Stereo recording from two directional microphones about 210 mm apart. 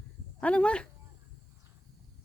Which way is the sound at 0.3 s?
5° left (ahead or behind).